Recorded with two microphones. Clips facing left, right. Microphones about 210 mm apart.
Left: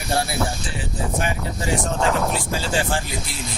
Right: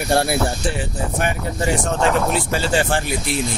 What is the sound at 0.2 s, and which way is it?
Speech, 65° right (ahead or behind).